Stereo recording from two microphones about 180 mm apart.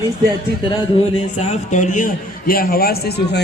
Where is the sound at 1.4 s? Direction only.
40° left (ahead or behind).